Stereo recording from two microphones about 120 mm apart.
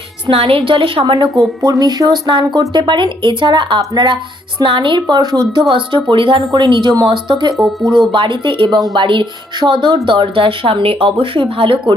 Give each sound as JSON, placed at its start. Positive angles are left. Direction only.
{"t": 0.3, "sound": "speech", "side_deg": -50}
{"t": 1.6, "sound": "speech", "side_deg": -35}
{"t": 7.5, "sound": "speech", "side_deg": 0}
{"t": 8.1, "sound": "speech", "side_deg": -45}